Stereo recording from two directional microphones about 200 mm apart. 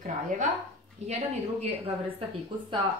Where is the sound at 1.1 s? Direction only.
30° right (ahead or behind).